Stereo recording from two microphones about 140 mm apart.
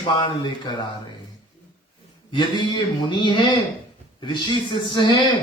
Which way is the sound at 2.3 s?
35° left (ahead or behind).